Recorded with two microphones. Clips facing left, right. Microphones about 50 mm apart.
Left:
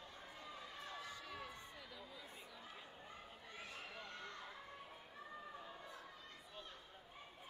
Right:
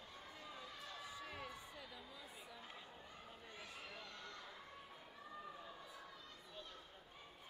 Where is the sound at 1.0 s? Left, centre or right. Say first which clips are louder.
Even; centre.